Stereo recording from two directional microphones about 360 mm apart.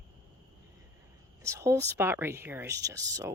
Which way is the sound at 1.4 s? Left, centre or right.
Centre.